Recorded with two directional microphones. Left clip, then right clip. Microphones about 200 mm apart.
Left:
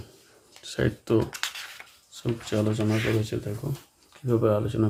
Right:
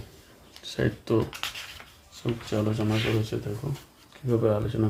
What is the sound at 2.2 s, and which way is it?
Speech, 20° left (ahead or behind).